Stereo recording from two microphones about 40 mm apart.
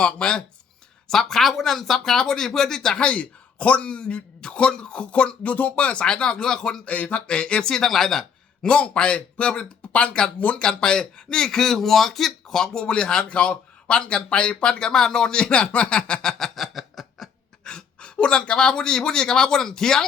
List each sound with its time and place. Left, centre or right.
0.0 s speech: left
1.0 s speech: centre
2.9 s speech: left
6.8 s speech: left
7.3 s speech: left
7.7 s speech: centre
8.6 s speech: left; by 12.7 s centre
12.7 s speech: left
16.4 s a sound: centre
17.6 s speech: centre